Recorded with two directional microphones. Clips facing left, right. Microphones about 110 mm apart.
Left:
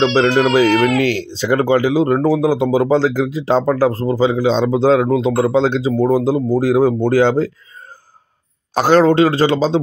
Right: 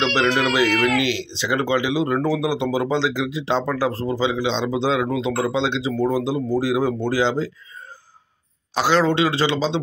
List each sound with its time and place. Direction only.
0.0 s speech: 45° left (ahead or behind)
8.7 s speech: 45° left (ahead or behind)